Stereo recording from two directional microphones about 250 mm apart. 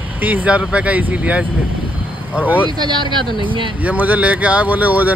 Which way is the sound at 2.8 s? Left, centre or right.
Centre.